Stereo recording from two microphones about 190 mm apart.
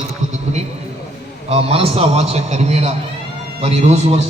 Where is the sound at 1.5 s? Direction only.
30° right (ahead or behind).